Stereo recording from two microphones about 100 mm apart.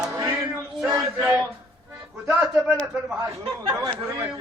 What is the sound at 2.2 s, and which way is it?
Speech, 20° right (ahead or behind).